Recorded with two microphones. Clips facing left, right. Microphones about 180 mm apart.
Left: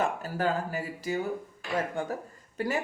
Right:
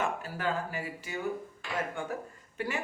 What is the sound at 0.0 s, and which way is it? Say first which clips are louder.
Speech: left 4 dB; 40° left (ahead or behind).